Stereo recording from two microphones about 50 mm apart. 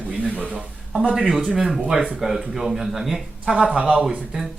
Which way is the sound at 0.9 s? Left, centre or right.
Centre.